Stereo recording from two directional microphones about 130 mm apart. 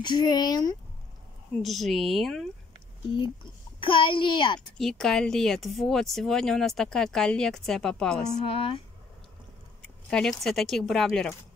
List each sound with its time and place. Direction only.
0.0 s a child's voice: 35° left (ahead or behind)
1.6 s speech: centre (ahead or behind)
3.8 s a child's voice: 40° left (ahead or behind)
4.6 s speech: 5° left (ahead or behind)
8.5 s speech: 45° left (ahead or behind)
9.8 s a sound: 10° left (ahead or behind)
10.4 s speech: 5° left (ahead or behind)